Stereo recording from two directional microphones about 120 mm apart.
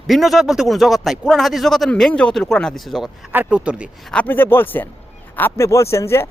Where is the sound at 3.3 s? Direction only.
10° right (ahead or behind).